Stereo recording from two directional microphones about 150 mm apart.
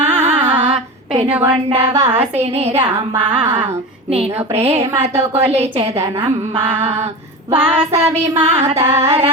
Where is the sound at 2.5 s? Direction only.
45° right (ahead or behind).